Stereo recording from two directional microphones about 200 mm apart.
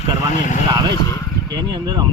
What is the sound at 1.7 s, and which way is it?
Speech, 20° right (ahead or behind).